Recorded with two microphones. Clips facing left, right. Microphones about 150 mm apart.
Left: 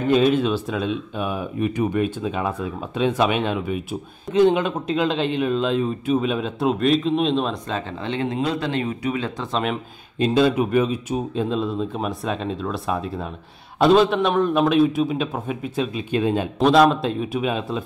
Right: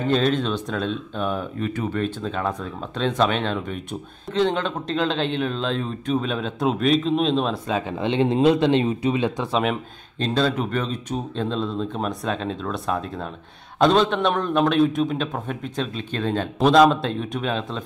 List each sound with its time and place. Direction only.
0.1 s speech: 10° left (ahead or behind)
8.0 s speech: 20° right (ahead or behind)
9.5 s speech: centre (ahead or behind)
10.1 s speech: 10° left (ahead or behind)
16.5 s speech: centre (ahead or behind)